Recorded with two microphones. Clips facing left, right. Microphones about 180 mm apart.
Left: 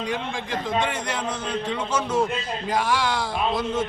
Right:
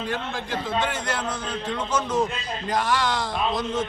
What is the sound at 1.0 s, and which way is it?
A man's voice, 10° left (ahead or behind).